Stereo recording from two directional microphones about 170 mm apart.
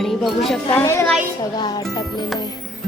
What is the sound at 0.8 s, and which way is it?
A child's voice, 15° left (ahead or behind).